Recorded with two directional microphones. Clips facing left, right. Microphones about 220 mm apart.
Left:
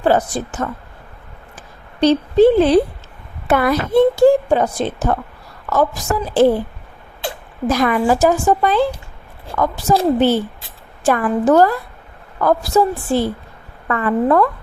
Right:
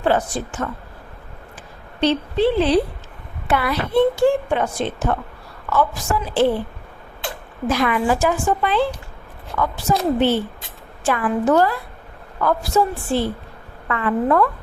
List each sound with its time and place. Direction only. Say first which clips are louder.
0.0 s a woman's voice: left 3 dB; 40° left (ahead or behind)
2.0 s a woman's voice: left 7 dB; 40° left (ahead or behind)
7.7 s a woman's voice: left 3 dB; 40° left (ahead or behind)